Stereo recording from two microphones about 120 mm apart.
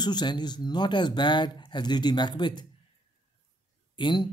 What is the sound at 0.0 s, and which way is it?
Speech, 35° left (ahead or behind).